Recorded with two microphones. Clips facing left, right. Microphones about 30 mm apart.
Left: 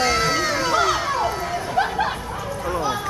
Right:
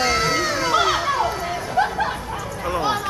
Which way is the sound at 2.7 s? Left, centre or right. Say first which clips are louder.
Right 2 dB; right.